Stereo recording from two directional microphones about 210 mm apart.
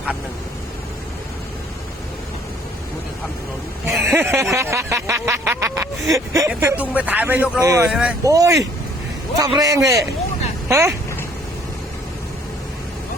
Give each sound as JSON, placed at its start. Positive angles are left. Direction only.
{"t": 4.0, "sound": "a sound", "side_deg": -10}
{"t": 4.5, "sound": "snicker", "side_deg": -10}
{"t": 7.9, "sound": "speech", "side_deg": -5}
{"t": 8.2, "sound": "a man's voice", "side_deg": -15}